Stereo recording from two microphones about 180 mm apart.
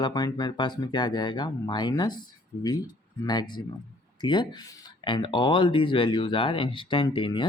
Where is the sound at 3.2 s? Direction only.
25° left (ahead or behind).